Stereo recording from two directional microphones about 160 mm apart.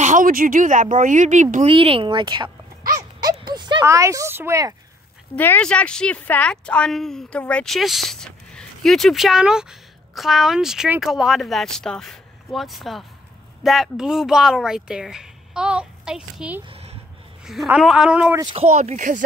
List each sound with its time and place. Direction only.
0.0 s speech: 55° right (ahead or behind)
1.7 s speech: 35° right (ahead or behind)
3.0 s a sound: 25° right (ahead or behind)
3.8 s speech: 20° right (ahead or behind)
5.3 s speech: 10° left (ahead or behind); by 16.6 s 5° right (ahead or behind)
16.6 s a sound: 35° right (ahead or behind)
17.6 s speech: 5° right (ahead or behind)
18.4 s speech: 30° right (ahead or behind)
18.7 s speech: 45° right (ahead or behind)